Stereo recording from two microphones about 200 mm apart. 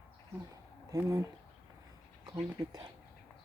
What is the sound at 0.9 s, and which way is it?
Speech, 15° right (ahead or behind).